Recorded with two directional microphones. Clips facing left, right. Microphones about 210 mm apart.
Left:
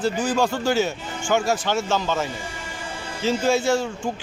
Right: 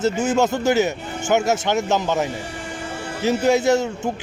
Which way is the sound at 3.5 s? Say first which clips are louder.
Right 4 dB; 20° right (ahead or behind).